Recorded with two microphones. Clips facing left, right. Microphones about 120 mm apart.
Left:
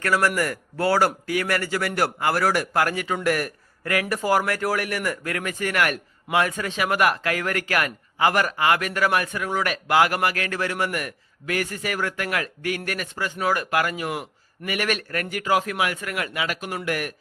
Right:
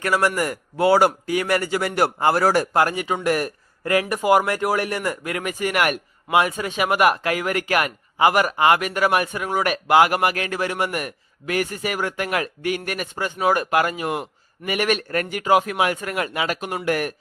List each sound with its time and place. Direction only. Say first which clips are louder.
0.0 s speech: right 1 dB; 20° right (ahead or behind)